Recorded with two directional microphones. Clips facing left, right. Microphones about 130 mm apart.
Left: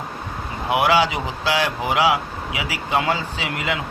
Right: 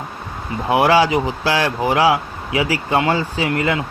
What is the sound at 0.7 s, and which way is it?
Speech, 30° right (ahead or behind).